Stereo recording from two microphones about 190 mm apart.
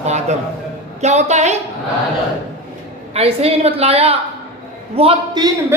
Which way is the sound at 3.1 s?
30° right (ahead or behind).